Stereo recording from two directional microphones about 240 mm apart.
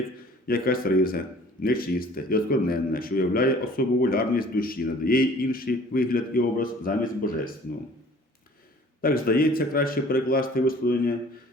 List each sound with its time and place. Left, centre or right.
0.4 s a man's voice: left
9.0 s a man's voice: left